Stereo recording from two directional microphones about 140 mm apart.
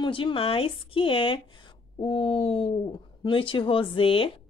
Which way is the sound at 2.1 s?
45° left (ahead or behind).